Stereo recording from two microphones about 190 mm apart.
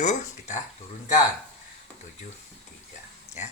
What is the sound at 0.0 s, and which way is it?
Speech, 40° left (ahead or behind).